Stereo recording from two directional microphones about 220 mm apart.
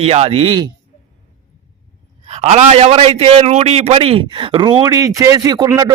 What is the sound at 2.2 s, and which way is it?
A man's voice, 30° right (ahead or behind).